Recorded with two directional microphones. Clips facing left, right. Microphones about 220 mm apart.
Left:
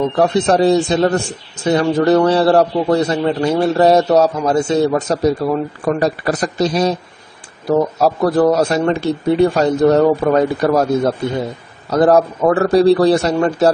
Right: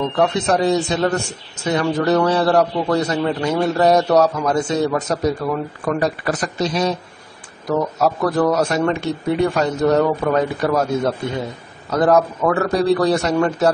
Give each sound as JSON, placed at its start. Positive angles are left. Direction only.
{"t": 0.2, "sound": "a man's voice", "side_deg": 35}